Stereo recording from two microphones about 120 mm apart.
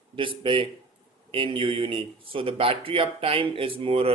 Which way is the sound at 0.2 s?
45° right (ahead or behind).